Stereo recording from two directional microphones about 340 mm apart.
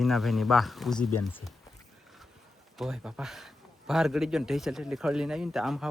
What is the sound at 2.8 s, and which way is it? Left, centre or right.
Speech, centre.